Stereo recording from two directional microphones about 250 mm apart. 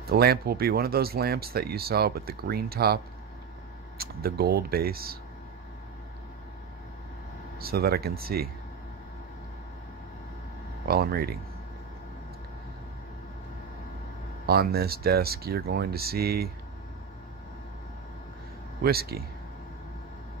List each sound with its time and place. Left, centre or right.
0.1 s speech: right
4.0 s speech: right
7.5 s speech: right
10.9 s speech: right
14.4 s speech: right
18.8 s speech: right